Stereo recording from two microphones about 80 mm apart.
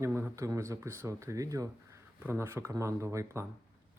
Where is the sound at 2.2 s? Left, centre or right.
Right.